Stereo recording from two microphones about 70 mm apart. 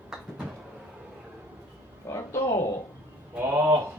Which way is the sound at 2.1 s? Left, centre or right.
Left.